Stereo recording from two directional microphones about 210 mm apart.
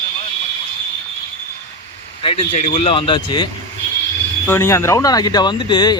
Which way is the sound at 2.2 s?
25° left (ahead or behind).